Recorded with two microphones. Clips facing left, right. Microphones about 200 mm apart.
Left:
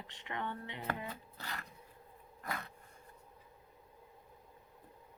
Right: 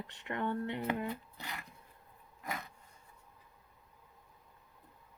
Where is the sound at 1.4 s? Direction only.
15° right (ahead or behind).